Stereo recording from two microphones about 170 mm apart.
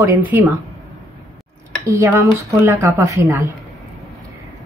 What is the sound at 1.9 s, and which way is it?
Speech, 15° right (ahead or behind).